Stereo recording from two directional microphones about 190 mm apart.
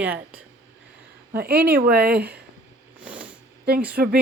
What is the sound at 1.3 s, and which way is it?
Speech, 55° right (ahead or behind).